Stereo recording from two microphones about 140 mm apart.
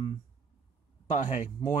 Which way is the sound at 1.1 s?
65° left (ahead or behind).